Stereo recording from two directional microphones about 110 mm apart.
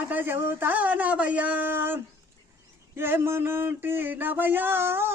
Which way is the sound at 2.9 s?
20° right (ahead or behind).